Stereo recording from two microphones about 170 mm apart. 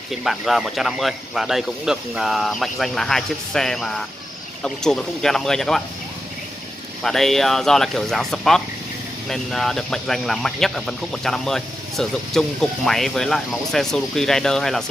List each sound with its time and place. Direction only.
0.1 s speech: centre (ahead or behind)
7.0 s speech: centre (ahead or behind)